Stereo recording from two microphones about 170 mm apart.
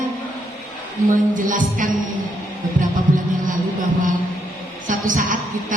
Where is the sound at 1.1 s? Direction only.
50° right (ahead or behind).